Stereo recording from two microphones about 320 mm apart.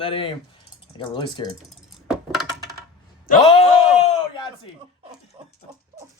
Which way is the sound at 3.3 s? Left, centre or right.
Centre.